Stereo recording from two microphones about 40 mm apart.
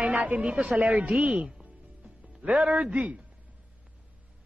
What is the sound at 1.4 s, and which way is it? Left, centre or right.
Music, right.